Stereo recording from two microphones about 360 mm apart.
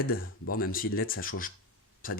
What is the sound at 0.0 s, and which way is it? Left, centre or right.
Speech, left.